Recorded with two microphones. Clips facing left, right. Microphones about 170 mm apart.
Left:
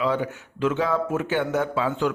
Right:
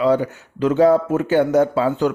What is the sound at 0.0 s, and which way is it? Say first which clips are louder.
A man's voice: right 7 dB; 40° right (ahead or behind).